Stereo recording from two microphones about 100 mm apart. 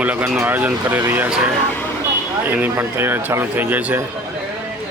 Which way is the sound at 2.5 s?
20° right (ahead or behind).